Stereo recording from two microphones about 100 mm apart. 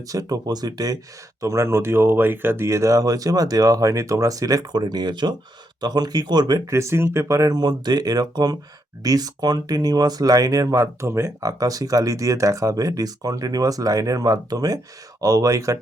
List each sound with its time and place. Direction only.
0.1 s speech: 40° right (ahead or behind)
1.4 s speech: 30° right (ahead or behind)